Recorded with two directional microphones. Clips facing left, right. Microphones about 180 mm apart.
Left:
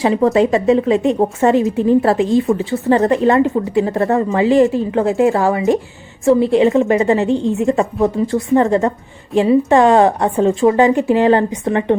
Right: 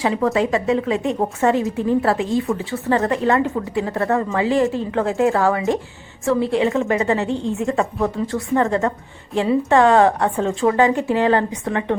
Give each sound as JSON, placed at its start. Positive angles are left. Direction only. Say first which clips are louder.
{"t": 0.0, "sound": "a woman's voice", "louder": "left 6 dB", "side_deg": 20}